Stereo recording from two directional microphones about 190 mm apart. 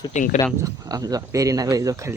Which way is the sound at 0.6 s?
20° right (ahead or behind).